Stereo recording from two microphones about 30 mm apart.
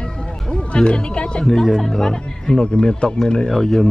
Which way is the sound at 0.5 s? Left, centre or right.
Left.